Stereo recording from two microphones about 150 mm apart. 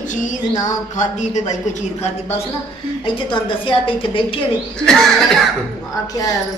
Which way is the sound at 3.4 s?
35° left (ahead or behind).